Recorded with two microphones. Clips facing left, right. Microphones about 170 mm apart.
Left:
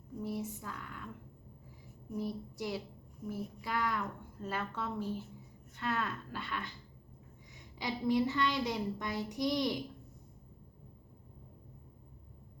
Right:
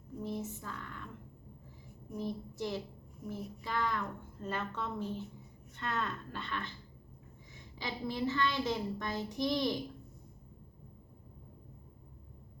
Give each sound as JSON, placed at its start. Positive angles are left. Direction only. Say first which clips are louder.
{"t": 0.2, "sound": "a woman's voice", "louder": "left 1 dB", "side_deg": 10}
{"t": 2.1, "sound": "a woman's voice", "louder": "even", "side_deg": 10}
{"t": 7.8, "sound": "a woman's voice", "louder": "left 5 dB", "side_deg": 15}